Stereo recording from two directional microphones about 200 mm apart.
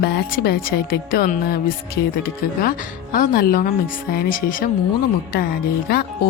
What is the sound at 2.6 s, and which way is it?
Speech, 45° left (ahead or behind).